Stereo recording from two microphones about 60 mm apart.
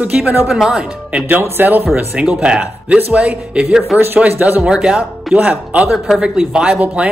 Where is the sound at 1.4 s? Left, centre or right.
Right.